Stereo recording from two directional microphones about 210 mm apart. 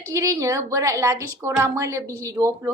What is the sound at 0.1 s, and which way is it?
A woman's voice, 15° right (ahead or behind).